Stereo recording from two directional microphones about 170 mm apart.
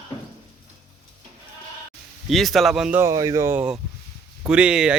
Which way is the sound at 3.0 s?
20° right (ahead or behind).